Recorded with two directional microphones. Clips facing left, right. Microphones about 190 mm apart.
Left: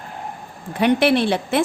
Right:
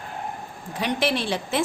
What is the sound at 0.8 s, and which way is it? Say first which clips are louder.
Speech: left 8 dB; 60° left (ahead or behind).